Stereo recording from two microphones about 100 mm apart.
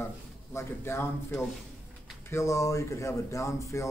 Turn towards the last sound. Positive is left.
turn(degrees=30)  # may be behind; listen again after turning